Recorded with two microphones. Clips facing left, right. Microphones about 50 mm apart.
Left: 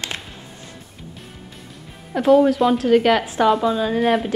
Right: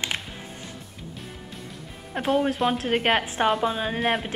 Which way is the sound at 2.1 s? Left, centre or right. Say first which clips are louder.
Left 9 dB; right.